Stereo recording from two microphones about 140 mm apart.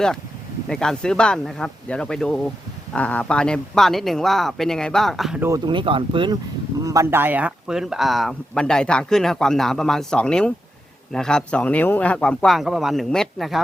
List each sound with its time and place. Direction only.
0.7 s speech: 5° left (ahead or behind)
5.4 s speech: 20° right (ahead or behind)
5.6 s speech: 35° right (ahead or behind)
6.8 s speech: 20° right (ahead or behind); by 13.6 s centre (ahead or behind)